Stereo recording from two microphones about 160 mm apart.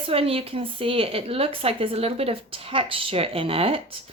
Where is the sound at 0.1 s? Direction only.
35° right (ahead or behind).